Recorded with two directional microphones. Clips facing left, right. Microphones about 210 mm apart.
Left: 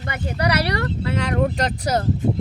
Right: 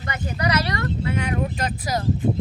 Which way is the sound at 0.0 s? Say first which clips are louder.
Left 2 dB; 60° left (ahead or behind).